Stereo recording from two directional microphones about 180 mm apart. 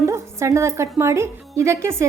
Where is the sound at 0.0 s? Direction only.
15° right (ahead or behind).